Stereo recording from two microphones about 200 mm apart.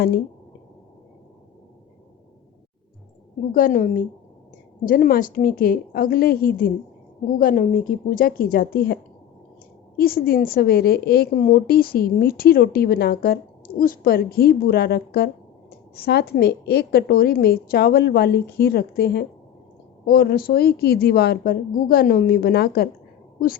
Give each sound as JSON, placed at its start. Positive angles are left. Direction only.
{"t": 3.5, "sound": "a woman's voice", "side_deg": 45}
{"t": 10.0, "sound": "a woman's voice", "side_deg": 50}